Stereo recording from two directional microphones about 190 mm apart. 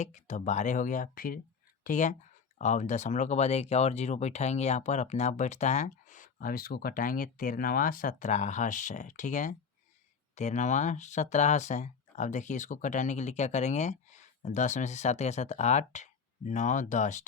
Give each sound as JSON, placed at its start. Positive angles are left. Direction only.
{"t": 0.0, "sound": "speech", "side_deg": 40}